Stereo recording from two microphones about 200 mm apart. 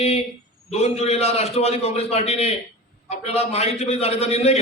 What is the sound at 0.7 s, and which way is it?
A man's voice, 30° left (ahead or behind).